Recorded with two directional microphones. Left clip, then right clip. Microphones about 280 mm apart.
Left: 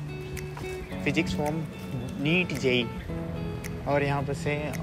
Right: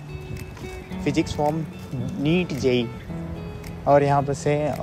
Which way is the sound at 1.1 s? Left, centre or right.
Centre.